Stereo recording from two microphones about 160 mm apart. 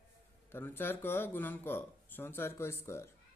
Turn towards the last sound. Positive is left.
turn(degrees=15)  # may be behind; listen again after turning